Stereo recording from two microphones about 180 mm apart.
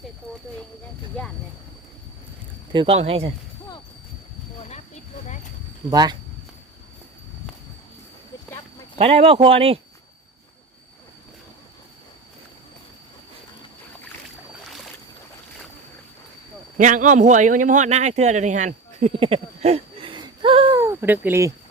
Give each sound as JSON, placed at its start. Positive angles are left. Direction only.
{"t": 2.7, "sound": "speech", "side_deg": -30}
{"t": 5.9, "sound": "speech", "side_deg": -20}
{"t": 9.0, "sound": "speech", "side_deg": -35}
{"t": 16.7, "sound": "speech", "side_deg": -45}
{"t": 20.8, "sound": "speech", "side_deg": -15}